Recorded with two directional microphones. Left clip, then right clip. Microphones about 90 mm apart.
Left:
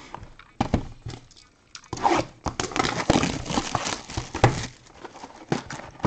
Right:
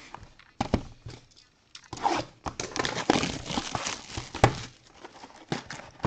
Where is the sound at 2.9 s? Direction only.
Centre (ahead or behind).